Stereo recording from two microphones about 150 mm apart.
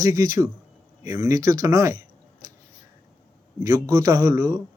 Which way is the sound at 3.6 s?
20° right (ahead or behind).